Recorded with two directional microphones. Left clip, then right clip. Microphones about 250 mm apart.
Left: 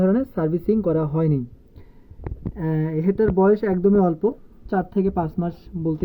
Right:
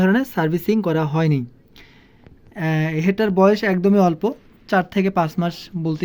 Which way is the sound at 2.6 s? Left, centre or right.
Centre.